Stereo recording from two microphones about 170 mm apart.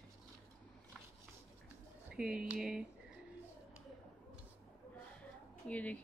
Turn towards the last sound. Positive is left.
turn(degrees=10)  # may be behind; listen again after turning